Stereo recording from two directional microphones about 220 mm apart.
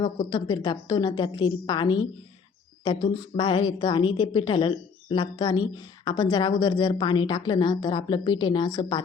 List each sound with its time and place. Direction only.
0.0 s a woman's voice: 20° left (ahead or behind)